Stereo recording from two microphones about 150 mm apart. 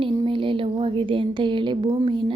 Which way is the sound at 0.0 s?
35° right (ahead or behind).